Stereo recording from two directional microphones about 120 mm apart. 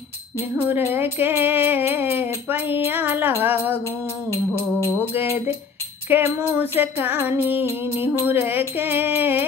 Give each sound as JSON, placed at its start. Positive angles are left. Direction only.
{"t": 0.6, "sound": "music", "side_deg": -15}
{"t": 4.3, "sound": "music", "side_deg": 25}
{"t": 6.0, "sound": "music", "side_deg": -15}